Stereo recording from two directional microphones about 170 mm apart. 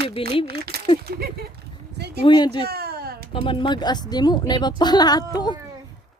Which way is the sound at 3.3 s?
30° left (ahead or behind).